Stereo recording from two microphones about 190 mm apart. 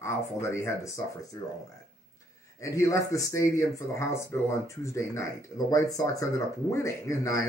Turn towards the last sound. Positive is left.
turn(degrees=15)  # may be behind; listen again after turning